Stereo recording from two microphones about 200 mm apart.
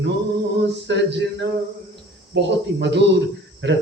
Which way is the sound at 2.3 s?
60° right (ahead or behind).